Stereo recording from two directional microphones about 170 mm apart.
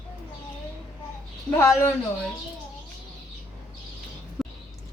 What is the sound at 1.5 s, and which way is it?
Speech, 20° left (ahead or behind).